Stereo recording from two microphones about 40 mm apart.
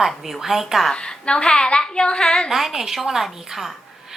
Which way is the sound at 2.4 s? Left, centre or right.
Centre.